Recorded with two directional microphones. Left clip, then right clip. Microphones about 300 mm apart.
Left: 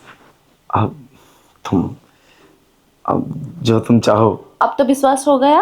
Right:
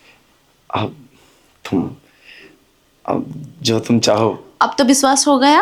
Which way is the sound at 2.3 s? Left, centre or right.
Centre.